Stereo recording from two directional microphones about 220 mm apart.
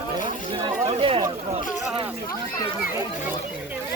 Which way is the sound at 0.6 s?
25° right (ahead or behind).